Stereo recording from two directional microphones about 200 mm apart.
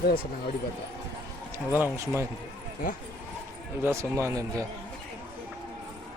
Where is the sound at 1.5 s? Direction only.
10° right (ahead or behind).